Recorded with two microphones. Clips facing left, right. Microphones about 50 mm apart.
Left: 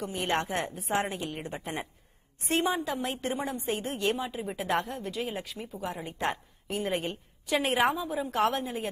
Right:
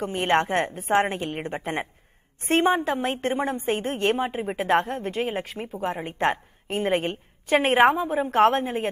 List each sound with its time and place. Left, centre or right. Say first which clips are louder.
0.0 s a woman's voice: right 7 dB; right